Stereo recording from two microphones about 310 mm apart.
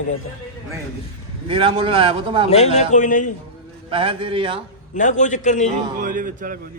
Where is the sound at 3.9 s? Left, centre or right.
Centre.